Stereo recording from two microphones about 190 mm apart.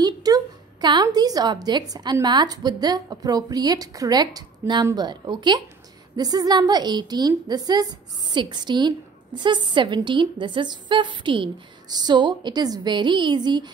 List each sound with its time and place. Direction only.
0.0 s a woman's voice: 20° right (ahead or behind)